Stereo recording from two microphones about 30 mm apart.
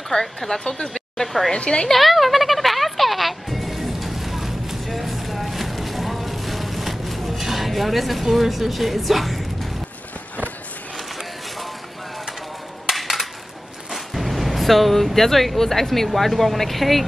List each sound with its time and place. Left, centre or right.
0.1 s a woman's voice: centre
0.7 s a woman's voice: left
1.5 s a woman's voice: left
1.9 s music: centre
12.9 s a sound: centre
13.8 s a woman's voice: centre